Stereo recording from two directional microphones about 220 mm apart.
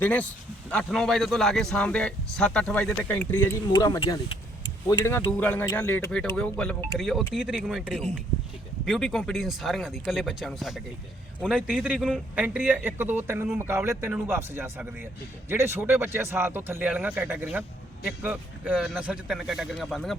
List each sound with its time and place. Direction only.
0.0 s a man's voice: 5° left (ahead or behind)